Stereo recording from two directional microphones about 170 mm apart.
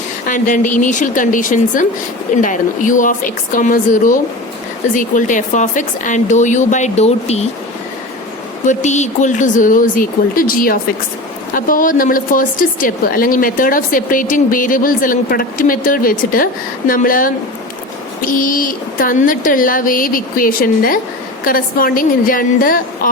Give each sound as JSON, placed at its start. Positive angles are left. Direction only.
{"t": 0.3, "sound": "a woman's voice", "side_deg": 50}
{"t": 8.6, "sound": "a woman's voice", "side_deg": 45}